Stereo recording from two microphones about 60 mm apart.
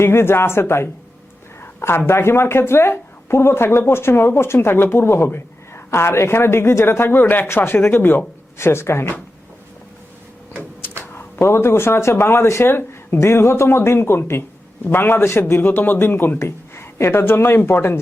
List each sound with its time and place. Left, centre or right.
0.0 s speech: left
1.6 s a sound: left
2.0 s speech: left
8.5 s speech: left
11.2 s a man's voice: left